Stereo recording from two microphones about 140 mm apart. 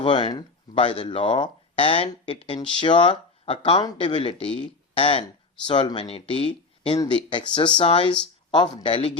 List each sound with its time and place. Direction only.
0.0 s speech: 35° left (ahead or behind)